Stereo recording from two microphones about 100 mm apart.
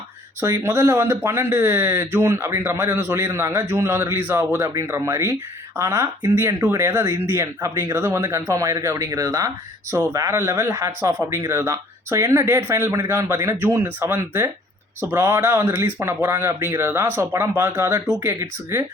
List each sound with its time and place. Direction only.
0.6 s speech: 25° right (ahead or behind)